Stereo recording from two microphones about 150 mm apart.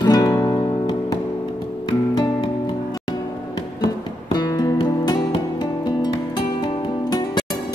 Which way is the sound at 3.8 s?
25° left (ahead or behind).